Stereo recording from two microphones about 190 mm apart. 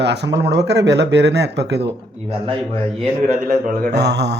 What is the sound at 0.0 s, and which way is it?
Speech, 65° right (ahead or behind).